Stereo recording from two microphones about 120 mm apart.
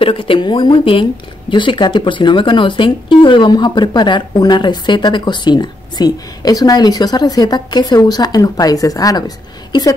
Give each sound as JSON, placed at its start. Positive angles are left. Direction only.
{"t": 0.0, "sound": "a woman's voice", "side_deg": 45}